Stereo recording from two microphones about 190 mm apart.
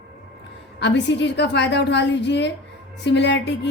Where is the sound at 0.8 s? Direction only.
65° left (ahead or behind).